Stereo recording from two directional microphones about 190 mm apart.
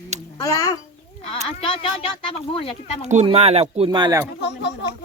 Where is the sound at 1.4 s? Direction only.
30° left (ahead or behind).